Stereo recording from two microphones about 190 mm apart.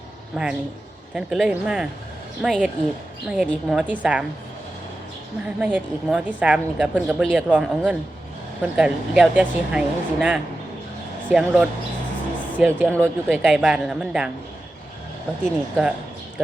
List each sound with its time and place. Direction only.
0.4 s a woman's voice: centre (ahead or behind)
5.5 s a woman's voice: 10° right (ahead or behind)
12.9 s speech: 5° left (ahead or behind)
13.3 s a woman's voice: 5° right (ahead or behind)
15.4 s a woman's voice: 5° right (ahead or behind)